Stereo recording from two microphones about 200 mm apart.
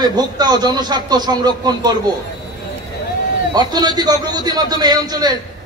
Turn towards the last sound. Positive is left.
turn(degrees=-20)  # may be behind; listen again after turning